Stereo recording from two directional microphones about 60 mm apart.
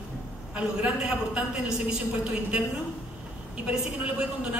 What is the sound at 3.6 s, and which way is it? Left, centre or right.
Speech, centre.